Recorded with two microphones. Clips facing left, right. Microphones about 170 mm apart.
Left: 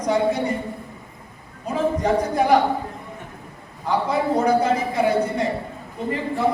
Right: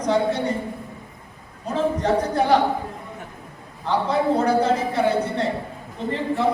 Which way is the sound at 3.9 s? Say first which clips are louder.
Right 1 dB; 10° left (ahead or behind).